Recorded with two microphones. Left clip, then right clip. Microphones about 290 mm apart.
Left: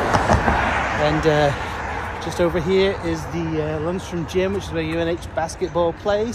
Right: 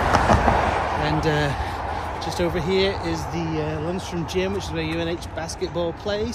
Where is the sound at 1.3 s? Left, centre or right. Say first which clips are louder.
Left 6 dB; centre.